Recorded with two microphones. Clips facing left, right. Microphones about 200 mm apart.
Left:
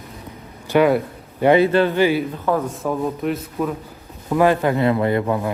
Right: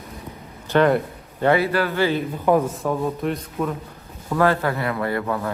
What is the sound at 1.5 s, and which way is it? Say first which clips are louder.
Speech: left 5 dB; 20° left (ahead or behind).